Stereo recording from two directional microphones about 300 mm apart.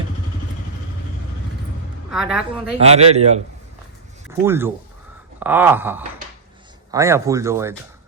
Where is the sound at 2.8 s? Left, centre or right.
Right.